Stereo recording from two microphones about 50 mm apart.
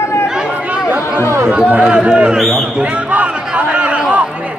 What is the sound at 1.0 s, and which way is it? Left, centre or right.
Chatter, left.